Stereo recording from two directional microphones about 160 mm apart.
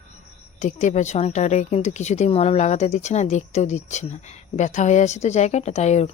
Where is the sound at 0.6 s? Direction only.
50° left (ahead or behind).